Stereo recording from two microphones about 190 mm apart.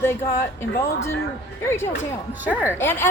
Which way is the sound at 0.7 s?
90° left.